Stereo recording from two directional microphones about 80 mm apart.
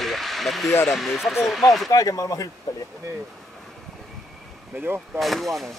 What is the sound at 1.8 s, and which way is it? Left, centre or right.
Speech, left.